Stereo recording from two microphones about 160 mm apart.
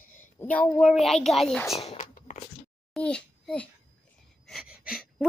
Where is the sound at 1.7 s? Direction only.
40° left (ahead or behind).